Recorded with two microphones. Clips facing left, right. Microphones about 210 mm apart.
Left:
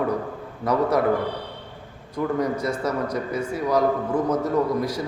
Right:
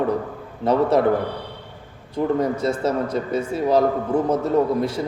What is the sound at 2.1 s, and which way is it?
A man's voice, 25° right (ahead or behind).